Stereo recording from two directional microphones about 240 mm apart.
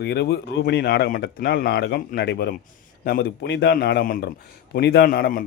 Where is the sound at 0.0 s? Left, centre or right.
Left.